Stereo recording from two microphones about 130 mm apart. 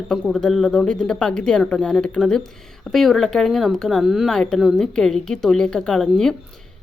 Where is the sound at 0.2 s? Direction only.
Centre (ahead or behind).